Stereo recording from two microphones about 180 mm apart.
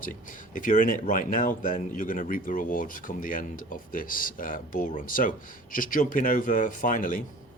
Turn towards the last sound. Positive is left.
turn(degrees=50)  # may be behind; listen again after turning